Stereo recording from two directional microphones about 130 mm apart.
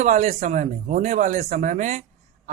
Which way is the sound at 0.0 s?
70° right (ahead or behind).